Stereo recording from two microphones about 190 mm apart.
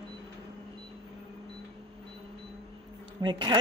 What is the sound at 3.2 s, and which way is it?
Speech, 25° right (ahead or behind).